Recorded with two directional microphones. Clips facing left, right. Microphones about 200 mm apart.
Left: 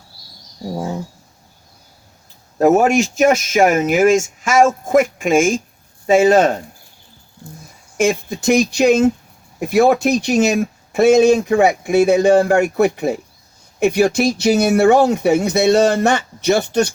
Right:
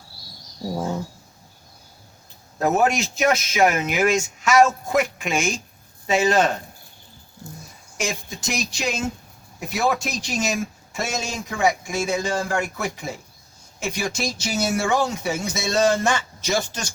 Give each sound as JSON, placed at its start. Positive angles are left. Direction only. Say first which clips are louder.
{"t": 2.6, "sound": "speech", "louder": "left 8 dB", "side_deg": 45}
{"t": 7.9, "sound": "speech", "louder": "left 12 dB", "side_deg": 55}